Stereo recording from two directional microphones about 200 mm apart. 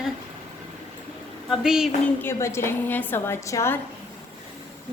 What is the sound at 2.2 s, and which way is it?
A woman's voice, 10° left (ahead or behind).